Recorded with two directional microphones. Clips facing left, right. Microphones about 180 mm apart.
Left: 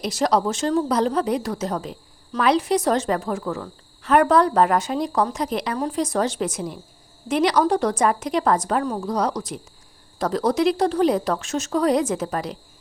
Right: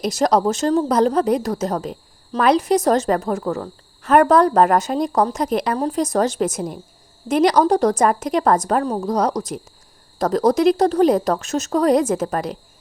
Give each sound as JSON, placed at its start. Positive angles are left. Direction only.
{"t": 0.0, "sound": "a woman's voice", "side_deg": -45}